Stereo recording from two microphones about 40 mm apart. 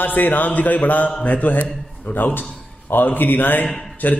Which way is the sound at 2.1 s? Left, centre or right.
Left.